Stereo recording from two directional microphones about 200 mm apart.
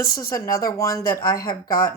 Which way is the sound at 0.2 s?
15° left (ahead or behind).